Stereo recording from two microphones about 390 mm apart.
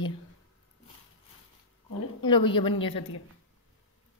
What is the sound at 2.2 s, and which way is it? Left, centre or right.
Speech, centre.